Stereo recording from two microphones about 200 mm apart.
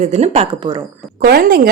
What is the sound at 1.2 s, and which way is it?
Speech, 50° right (ahead or behind).